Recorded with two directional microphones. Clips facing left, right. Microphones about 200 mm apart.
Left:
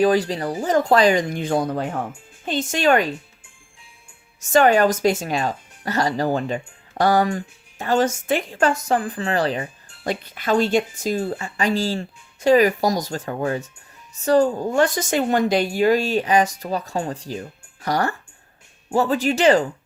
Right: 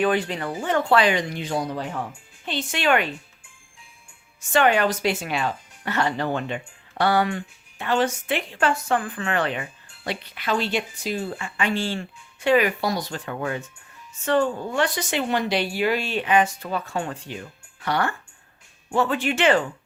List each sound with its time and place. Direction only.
0.0 s speech: 35° left (ahead or behind)
4.4 s speech: 40° left (ahead or behind)